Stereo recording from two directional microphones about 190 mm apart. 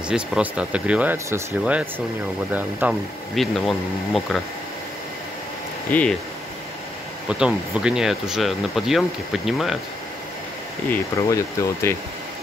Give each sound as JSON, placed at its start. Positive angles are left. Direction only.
{"t": 0.1, "sound": "speech", "side_deg": -5}
{"t": 5.9, "sound": "speech", "side_deg": 10}
{"t": 7.2, "sound": "speech", "side_deg": -5}
{"t": 10.9, "sound": "speech", "side_deg": 15}